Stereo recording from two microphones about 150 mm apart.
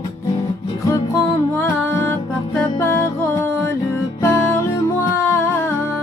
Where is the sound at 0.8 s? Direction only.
20° left (ahead or behind).